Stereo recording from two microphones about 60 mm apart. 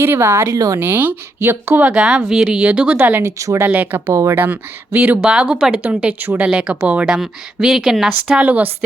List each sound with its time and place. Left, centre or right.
0.0 s speech: right
0.4 s speech: right
0.8 s speech: right
1.9 s speech: centre
2.6 s speech: centre
3.0 s speech: right
3.2 s speech: right
3.7 s speech: right
5.2 s speech: centre; by 6.5 s right
6.5 s speech: centre
7.0 s speech: centre
8.3 s speech: right